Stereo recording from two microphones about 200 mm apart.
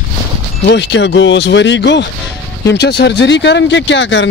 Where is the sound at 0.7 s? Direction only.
65° left (ahead or behind).